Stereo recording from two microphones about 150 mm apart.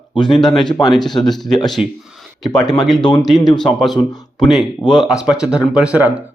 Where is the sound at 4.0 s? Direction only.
35° left (ahead or behind).